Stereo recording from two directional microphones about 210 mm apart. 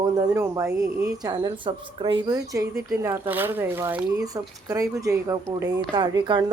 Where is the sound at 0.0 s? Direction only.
20° right (ahead or behind).